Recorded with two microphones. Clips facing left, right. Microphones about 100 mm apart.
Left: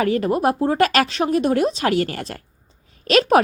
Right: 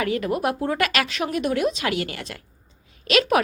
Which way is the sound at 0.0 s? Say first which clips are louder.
Left 5 dB; 35° left (ahead or behind).